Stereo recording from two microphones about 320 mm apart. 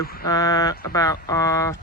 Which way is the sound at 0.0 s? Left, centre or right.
Left.